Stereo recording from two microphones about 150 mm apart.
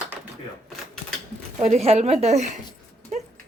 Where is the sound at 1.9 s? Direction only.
45° right (ahead or behind).